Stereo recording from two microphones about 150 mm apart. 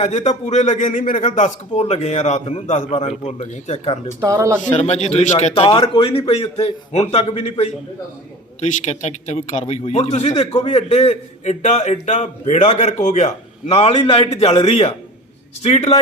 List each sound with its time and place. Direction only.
0.3 s a man's voice: 50° left (ahead or behind)
4.2 s speech: 20° right (ahead or behind)
4.6 s a man's voice: 50° left (ahead or behind)
5.5 s a man's voice: 35° left (ahead or behind)
8.8 s a man's voice: 50° left (ahead or behind)